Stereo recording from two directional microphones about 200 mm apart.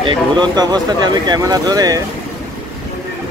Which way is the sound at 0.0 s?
25° right (ahead or behind).